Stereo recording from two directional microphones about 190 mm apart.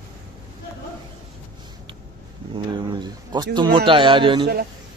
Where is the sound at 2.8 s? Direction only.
25° right (ahead or behind).